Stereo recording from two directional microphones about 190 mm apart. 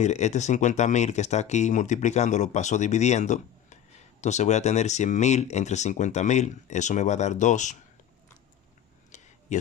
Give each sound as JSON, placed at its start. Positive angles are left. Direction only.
{"t": 0.0, "sound": "speech", "side_deg": 35}
{"t": 9.1, "sound": "a sound", "side_deg": 40}
{"t": 9.5, "sound": "speech", "side_deg": 40}